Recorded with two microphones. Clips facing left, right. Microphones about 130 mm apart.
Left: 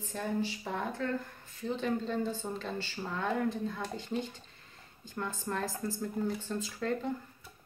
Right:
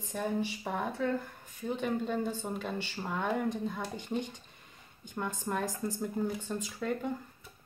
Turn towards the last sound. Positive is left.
turn(degrees=-10)  # may be behind; listen again after turning